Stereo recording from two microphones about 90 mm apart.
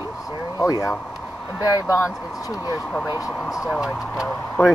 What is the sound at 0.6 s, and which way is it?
Speech, 40° left (ahead or behind).